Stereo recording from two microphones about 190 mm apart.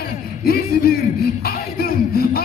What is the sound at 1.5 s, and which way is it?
Music, 55° left (ahead or behind).